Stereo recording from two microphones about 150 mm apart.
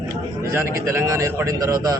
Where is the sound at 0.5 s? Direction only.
20° right (ahead or behind).